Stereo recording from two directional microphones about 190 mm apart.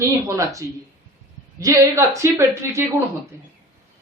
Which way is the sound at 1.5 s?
15° right (ahead or behind).